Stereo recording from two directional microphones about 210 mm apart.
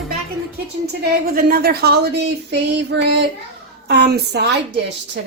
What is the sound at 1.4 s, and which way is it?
Speech, 45° right (ahead or behind).